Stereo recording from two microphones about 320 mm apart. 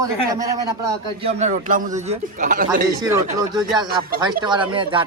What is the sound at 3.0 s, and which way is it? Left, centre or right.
A man's voice, centre.